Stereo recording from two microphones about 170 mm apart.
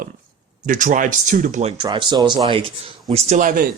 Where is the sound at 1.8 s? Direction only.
25° right (ahead or behind); by 3.6 s 50° right (ahead or behind).